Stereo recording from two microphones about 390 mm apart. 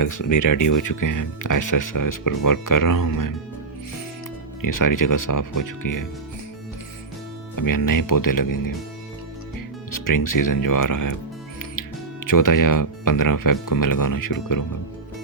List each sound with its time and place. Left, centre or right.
0.0 s speech: left
4.6 s speech: left
7.5 s speech: left
9.9 s speech: left